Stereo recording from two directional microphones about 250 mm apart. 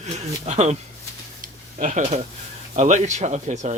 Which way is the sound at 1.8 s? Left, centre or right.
Right.